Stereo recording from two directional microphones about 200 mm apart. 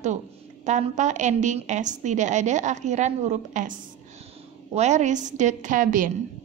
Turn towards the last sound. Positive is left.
turn(degrees=-40)  # may be behind; listen again after turning